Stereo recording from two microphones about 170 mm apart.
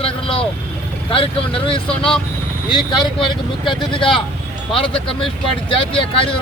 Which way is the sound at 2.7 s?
25° left (ahead or behind).